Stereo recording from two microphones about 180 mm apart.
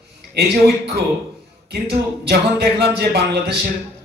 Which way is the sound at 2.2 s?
60° right (ahead or behind).